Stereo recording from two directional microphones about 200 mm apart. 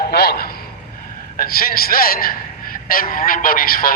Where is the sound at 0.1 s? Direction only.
50° left (ahead or behind).